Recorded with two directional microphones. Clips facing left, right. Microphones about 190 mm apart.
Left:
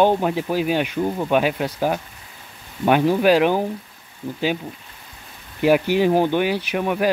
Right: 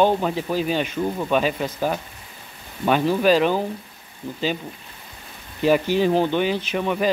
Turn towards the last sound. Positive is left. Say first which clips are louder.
# left 1 dB
turn(degrees=10)  # may be behind; listen again after turning